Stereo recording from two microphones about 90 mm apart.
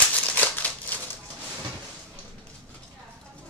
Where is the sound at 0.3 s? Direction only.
20° left (ahead or behind).